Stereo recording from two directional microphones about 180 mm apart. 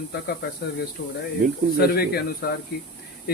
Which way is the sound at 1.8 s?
60° left (ahead or behind).